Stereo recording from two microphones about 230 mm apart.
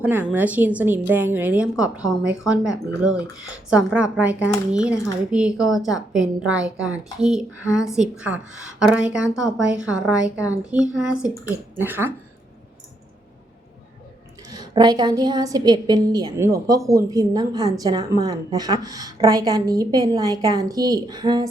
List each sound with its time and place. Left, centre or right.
0.0 s a woman's voice: centre
14.5 s a woman's voice: centre